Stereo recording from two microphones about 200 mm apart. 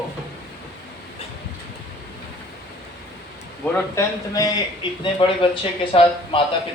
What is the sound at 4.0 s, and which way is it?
A man's voice, 15° left (ahead or behind).